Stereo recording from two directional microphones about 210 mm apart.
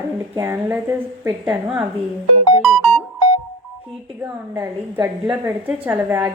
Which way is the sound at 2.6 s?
Centre (ahead or behind).